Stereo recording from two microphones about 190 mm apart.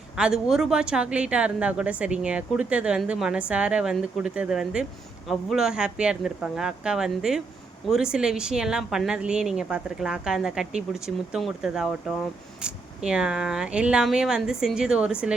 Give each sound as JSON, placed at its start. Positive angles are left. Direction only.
{"t": 0.2, "sound": "speech", "side_deg": -5}